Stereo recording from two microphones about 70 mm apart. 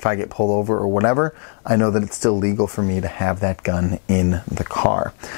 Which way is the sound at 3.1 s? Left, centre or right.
Centre.